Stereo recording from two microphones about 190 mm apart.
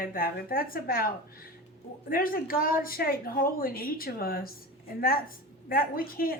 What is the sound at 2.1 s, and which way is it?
Speech, 50° left (ahead or behind).